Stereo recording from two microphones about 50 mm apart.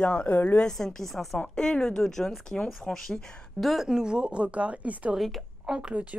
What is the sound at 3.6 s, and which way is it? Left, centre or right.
A woman's voice, centre.